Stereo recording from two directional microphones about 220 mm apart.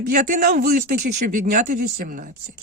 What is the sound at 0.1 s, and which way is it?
Speech, 35° right (ahead or behind).